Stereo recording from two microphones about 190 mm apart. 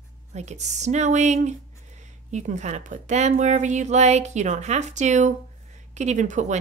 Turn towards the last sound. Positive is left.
turn(degrees=-40)  # may be behind; listen again after turning